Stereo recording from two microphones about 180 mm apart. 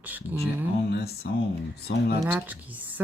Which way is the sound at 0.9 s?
65° left (ahead or behind).